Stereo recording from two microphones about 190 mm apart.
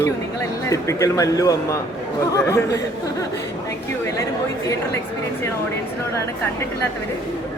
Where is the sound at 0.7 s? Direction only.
15° left (ahead or behind).